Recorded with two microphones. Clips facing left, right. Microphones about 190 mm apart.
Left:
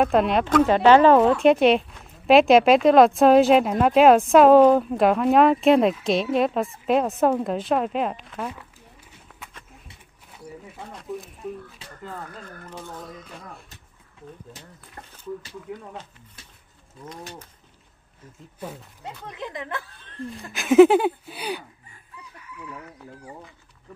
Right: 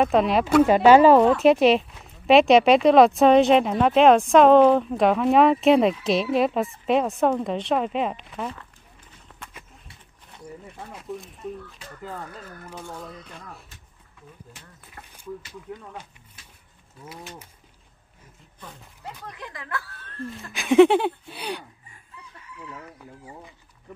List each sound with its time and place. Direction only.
0.0 s speech: centre (ahead or behind)
10.9 s speech: centre (ahead or behind)
12.6 s speech: 10° right (ahead or behind)
15.0 s a sound: 30° left (ahead or behind)
15.7 s speech: 10° left (ahead or behind)
19.0 s speech: 20° left (ahead or behind)
20.5 s speech: centre (ahead or behind)